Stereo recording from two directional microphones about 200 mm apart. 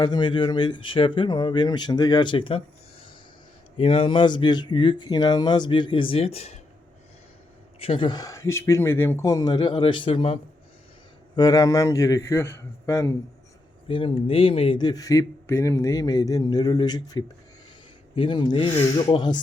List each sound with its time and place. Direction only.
0.0 s speech: 20° left (ahead or behind)
3.8 s speech: 25° left (ahead or behind)
7.8 s a man's voice: 25° left (ahead or behind)
13.8 s speech: 25° left (ahead or behind)